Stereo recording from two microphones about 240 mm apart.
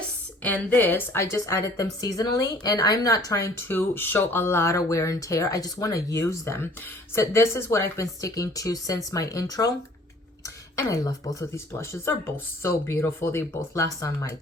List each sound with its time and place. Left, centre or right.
0.4 s a woman's voice: centre